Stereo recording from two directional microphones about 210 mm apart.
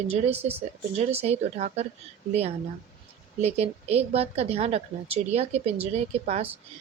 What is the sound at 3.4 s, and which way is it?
A woman's voice, 30° right (ahead or behind).